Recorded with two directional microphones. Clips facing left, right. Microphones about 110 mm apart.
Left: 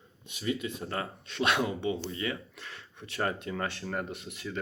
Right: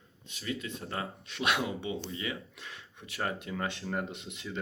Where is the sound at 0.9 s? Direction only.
15° right (ahead or behind).